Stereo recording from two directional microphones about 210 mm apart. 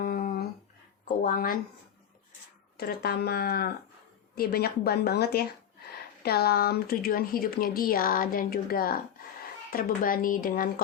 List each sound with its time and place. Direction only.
0.0 s a sound: 45° left (ahead or behind)
1.0 s speech: 40° left (ahead or behind)
2.7 s speech: 50° left (ahead or behind)